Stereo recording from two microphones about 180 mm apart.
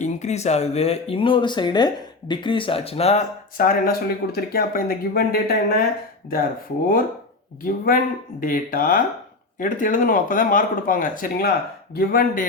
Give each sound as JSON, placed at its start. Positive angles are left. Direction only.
{"t": 0.0, "sound": "speech", "side_deg": 40}
{"t": 3.6, "sound": "speech", "side_deg": 55}
{"t": 7.6, "sound": "speech", "side_deg": 50}